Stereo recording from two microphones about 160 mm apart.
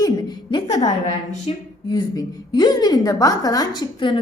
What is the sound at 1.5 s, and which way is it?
Speech, 40° left (ahead or behind).